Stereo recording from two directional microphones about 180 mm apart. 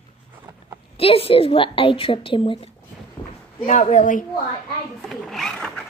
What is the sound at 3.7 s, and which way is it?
Speech, 45° left (ahead or behind).